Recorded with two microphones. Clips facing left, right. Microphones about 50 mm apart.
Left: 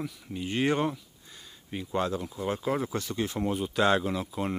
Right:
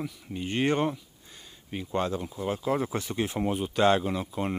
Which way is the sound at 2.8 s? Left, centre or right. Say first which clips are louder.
Right 1 dB; centre.